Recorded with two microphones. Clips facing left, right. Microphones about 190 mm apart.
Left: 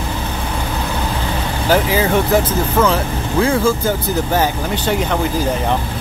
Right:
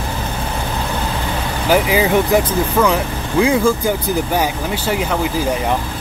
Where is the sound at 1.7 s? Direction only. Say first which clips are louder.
Right 1 dB; 15° right (ahead or behind).